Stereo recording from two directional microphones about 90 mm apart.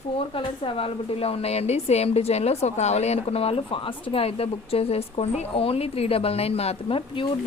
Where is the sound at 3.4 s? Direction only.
85° left.